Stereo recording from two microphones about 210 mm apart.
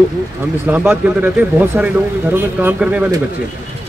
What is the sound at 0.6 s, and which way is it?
Speech, 5° right (ahead or behind).